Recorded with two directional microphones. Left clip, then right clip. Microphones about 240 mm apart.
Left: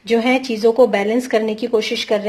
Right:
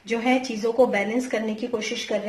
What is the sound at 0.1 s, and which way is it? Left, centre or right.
A woman's voice, left.